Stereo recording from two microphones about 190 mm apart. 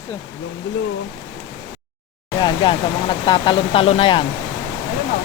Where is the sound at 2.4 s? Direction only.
25° left (ahead or behind).